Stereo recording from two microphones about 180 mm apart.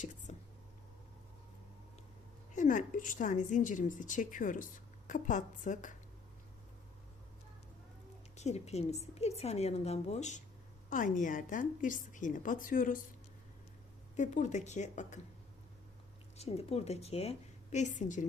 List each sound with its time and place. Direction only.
0.0 s a sound: 40° left (ahead or behind)
2.5 s a woman's voice: 45° left (ahead or behind)
8.4 s a woman's voice: 35° left (ahead or behind)
14.2 s a woman's voice: 40° left (ahead or behind)
16.4 s a woman's voice: 35° left (ahead or behind)